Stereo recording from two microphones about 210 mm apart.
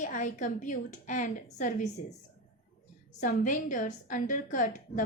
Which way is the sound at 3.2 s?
40° left (ahead or behind).